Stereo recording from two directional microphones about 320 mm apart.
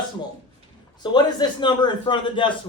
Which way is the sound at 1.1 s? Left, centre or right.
Centre.